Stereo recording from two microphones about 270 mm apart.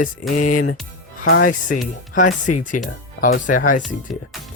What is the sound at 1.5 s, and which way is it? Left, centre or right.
Speech, left.